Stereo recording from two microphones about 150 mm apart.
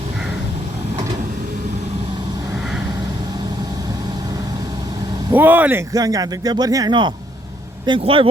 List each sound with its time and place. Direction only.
5.3 s speech: 10° right (ahead or behind); by 8.3 s 35° right (ahead or behind)